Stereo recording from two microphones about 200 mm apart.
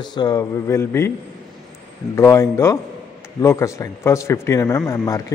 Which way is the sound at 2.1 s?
15° left (ahead or behind).